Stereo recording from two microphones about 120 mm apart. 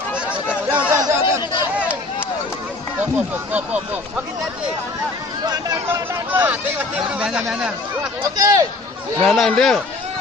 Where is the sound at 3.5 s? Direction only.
10° right (ahead or behind).